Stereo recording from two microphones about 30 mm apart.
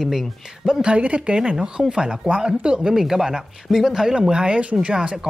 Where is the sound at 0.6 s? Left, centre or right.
Right.